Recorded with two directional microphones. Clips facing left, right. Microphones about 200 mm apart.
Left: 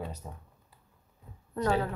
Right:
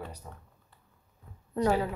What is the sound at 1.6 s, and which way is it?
Speech, 15° right (ahead or behind).